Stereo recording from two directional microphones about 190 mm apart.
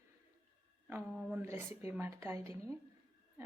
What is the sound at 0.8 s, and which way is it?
Speech, 10° right (ahead or behind).